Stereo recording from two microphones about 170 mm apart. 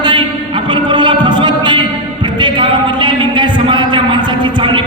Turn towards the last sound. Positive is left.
turn(degrees=-30)  # may be behind; listen again after turning